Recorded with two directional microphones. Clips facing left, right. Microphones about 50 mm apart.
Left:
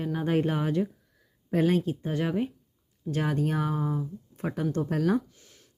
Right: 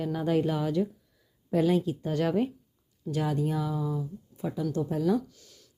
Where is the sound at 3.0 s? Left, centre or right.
Left.